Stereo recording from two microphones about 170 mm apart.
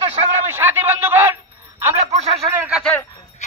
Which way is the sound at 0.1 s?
40° right (ahead or behind).